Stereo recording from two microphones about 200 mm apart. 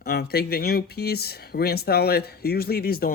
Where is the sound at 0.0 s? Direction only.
50° left (ahead or behind).